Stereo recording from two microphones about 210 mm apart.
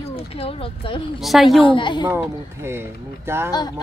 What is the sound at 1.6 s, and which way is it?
Speech, 25° left (ahead or behind).